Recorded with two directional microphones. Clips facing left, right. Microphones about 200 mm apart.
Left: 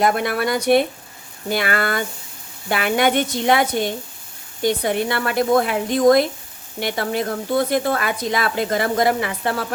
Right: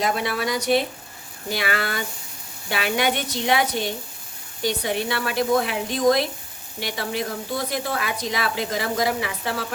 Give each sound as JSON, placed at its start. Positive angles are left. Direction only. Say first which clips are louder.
{"t": 0.0, "sound": "speech", "louder": "left 5 dB", "side_deg": 55}